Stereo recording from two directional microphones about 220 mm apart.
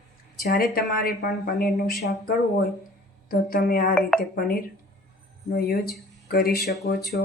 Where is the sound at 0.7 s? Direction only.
40° left (ahead or behind).